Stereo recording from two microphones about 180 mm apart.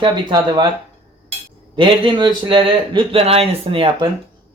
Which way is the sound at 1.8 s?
25° right (ahead or behind).